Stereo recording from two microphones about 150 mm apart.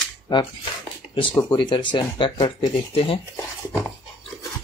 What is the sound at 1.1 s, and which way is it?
Speech, 35° left (ahead or behind).